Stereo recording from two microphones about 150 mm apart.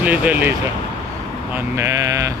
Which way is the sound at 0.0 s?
10° right (ahead or behind).